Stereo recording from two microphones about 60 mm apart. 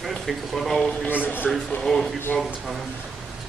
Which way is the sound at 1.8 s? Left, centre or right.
Centre.